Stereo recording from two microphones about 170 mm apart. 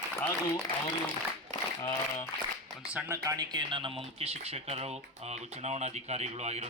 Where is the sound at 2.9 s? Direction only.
10° right (ahead or behind).